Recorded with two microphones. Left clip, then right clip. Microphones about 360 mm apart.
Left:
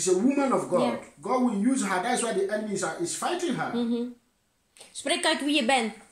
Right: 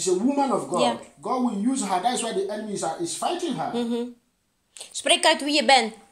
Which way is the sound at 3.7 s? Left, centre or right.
Right.